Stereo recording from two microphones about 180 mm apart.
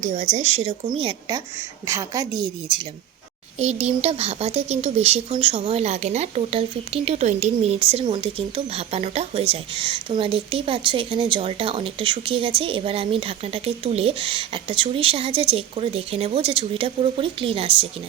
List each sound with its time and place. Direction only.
0.0 s a woman's voice: 40° right (ahead or behind); by 2.8 s 25° right (ahead or behind)
3.6 s speech: 35° right (ahead or behind)